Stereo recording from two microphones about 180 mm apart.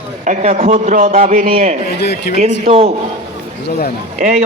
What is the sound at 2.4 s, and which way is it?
Speech, 35° right (ahead or behind).